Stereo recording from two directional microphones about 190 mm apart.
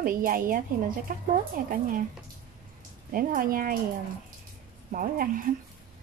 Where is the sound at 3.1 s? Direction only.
45° right (ahead or behind).